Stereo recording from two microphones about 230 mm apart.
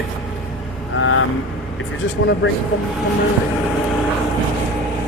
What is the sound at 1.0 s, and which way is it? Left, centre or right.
Speech, left.